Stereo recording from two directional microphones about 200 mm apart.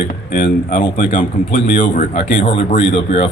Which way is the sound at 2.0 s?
30° left (ahead or behind).